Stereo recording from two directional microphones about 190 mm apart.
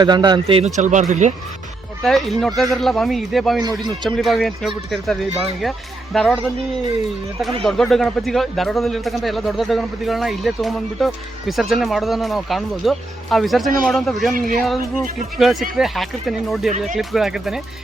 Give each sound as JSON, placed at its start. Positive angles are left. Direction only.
{"t": 0.0, "sound": "a man's voice", "side_deg": -20}
{"t": 0.8, "sound": "speech", "side_deg": -40}
{"t": 2.0, "sound": "speech", "side_deg": 0}
{"t": 3.6, "sound": "a man's voice", "side_deg": -20}
{"t": 4.0, "sound": "speech", "side_deg": 0}
{"t": 7.6, "sound": "speech", "side_deg": 0}
{"t": 15.4, "sound": "speech", "side_deg": 0}